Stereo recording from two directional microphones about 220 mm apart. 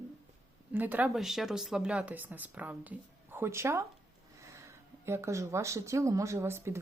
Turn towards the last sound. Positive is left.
turn(degrees=-10)  # may be behind; listen again after turning